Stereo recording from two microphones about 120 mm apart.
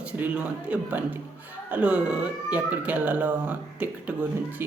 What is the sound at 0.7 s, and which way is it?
Speech, 10° right (ahead or behind).